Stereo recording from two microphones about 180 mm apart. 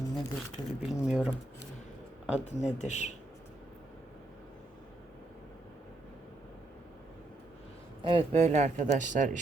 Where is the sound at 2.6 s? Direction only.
40° left (ahead or behind).